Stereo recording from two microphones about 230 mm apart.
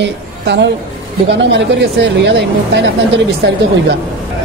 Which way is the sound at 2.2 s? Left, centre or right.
Right.